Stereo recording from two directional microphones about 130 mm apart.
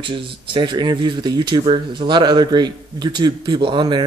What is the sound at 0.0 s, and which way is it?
Speech, 40° right (ahead or behind).